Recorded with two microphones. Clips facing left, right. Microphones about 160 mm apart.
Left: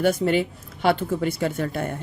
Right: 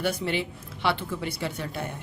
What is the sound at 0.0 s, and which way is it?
A woman's voice, 45° left (ahead or behind).